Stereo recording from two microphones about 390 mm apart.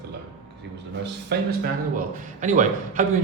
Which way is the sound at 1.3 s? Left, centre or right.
Right.